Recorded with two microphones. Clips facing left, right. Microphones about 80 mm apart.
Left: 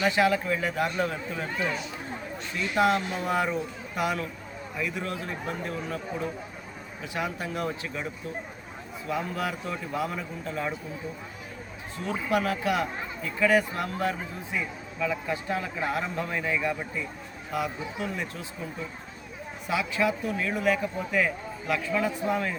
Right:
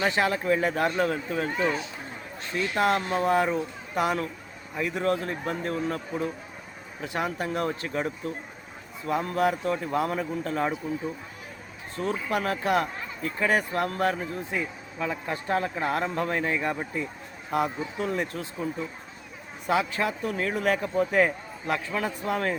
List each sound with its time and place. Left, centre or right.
0.0 s speech: right
2.8 s a man's voice: right
7.1 s a man's voice: right
9.0 s a man's voice: right
11.9 s speech: right
13.4 s speech: right
13.7 s a man's voice: right
14.5 s a man's voice: right
19.6 s a man's voice: right